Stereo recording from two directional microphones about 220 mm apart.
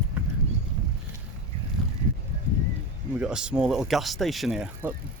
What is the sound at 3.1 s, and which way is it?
Speech, 5° right (ahead or behind).